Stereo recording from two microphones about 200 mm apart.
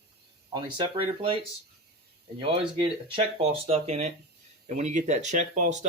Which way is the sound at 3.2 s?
30° right (ahead or behind).